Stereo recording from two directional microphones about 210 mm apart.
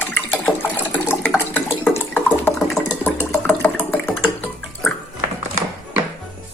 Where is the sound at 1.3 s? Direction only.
10° left (ahead or behind).